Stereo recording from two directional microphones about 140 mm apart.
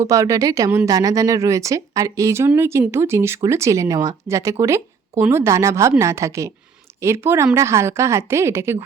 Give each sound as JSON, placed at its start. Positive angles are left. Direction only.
{"t": 0.0, "sound": "a woman's voice", "side_deg": -25}